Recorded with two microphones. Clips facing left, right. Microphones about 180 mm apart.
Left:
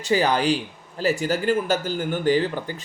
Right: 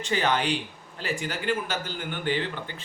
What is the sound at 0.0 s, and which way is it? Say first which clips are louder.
A man's voice: left 5 dB; 35° left (ahead or behind).